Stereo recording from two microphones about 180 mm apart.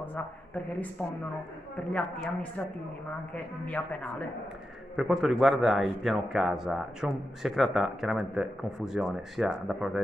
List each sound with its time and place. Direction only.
1.9 s a man's voice: 5° left (ahead or behind)
3.6 s a man's voice: 5° left (ahead or behind)